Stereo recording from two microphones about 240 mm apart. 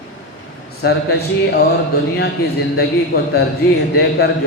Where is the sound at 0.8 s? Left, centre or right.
Left.